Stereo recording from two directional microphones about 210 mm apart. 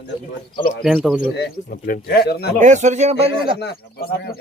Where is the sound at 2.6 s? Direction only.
35° right (ahead or behind).